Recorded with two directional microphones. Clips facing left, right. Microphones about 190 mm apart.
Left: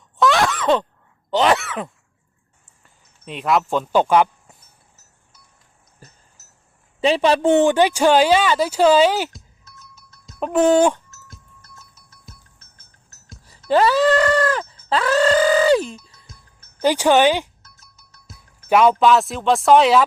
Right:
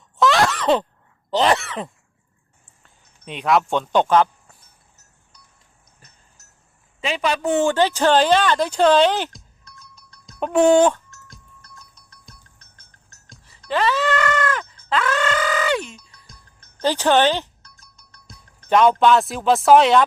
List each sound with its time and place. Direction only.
0.2 s groan: centre (ahead or behind)
1.3 s throat clearing: centre (ahead or behind)
3.0 s speech: centre (ahead or behind)
5.8 s cowbell: centre (ahead or behind)
7.0 s a sound: 35° left (ahead or behind); by 13.4 s 5° left (ahead or behind)
13.7 s a sound: 40° left (ahead or behind)
14.8 s music: 35° left (ahead or behind)
16.1 s music: 5° left (ahead or behind)